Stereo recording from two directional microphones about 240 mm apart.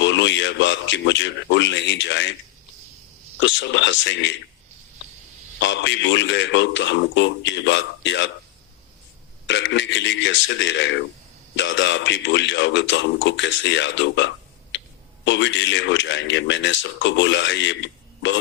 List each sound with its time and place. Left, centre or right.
0.0 s speech: left
3.4 s speech: left
5.5 s speech: left
9.5 s speech: left